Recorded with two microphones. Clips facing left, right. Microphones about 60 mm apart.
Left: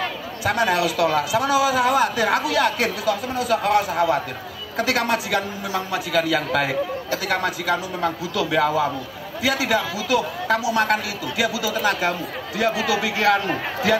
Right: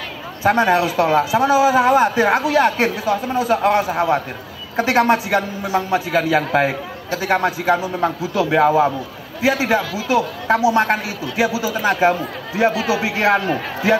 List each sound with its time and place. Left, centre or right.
0.4 s a man's voice: right